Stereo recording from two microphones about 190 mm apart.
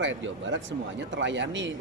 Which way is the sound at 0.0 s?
80° right.